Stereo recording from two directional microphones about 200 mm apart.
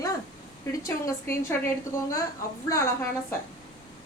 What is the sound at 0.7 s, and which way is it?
A woman's voice, 15° left (ahead or behind).